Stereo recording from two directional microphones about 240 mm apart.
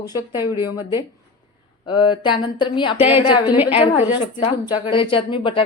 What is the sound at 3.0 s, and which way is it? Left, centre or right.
Speech, centre.